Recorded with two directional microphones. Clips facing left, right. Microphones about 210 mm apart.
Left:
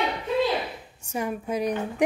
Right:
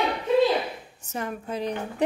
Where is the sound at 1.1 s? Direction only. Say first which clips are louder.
Left 3 dB; 10° left (ahead or behind).